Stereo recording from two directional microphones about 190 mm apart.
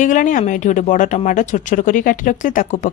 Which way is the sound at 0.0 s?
45° left (ahead or behind).